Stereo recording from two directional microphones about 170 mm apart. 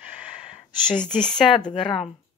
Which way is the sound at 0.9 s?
5° left (ahead or behind).